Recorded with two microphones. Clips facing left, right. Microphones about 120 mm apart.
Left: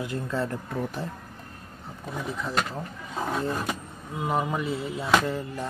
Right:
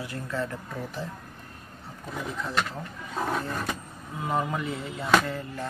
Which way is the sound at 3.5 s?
15° left (ahead or behind).